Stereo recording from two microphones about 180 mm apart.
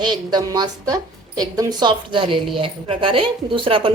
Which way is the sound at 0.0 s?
25° right (ahead or behind).